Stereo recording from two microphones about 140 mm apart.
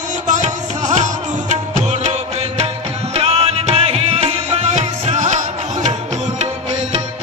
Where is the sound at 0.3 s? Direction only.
55° right (ahead or behind).